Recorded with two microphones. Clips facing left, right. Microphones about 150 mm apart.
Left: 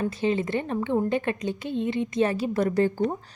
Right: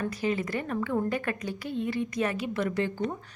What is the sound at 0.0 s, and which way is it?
A woman's voice, 25° left (ahead or behind).